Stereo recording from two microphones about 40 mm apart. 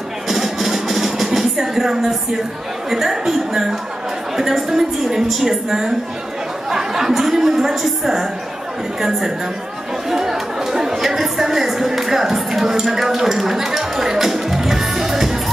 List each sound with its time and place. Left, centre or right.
0.3 s music: centre
2.9 s a woman's voice: centre
10.0 s chatter: centre